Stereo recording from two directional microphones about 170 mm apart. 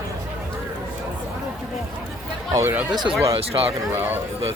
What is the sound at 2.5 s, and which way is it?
Speech, 15° right (ahead or behind).